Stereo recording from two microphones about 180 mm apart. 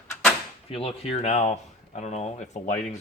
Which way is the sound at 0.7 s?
35° left (ahead or behind).